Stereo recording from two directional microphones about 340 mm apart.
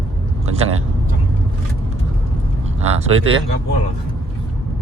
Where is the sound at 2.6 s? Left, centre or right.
Centre.